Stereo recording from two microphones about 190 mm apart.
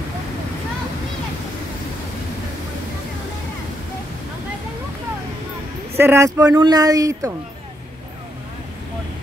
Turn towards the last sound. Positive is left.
turn(degrees=-15)  # may be behind; listen again after turning